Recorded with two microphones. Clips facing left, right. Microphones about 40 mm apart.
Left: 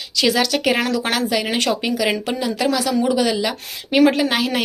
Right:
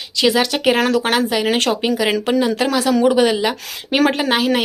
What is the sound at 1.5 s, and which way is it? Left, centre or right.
Speech, right.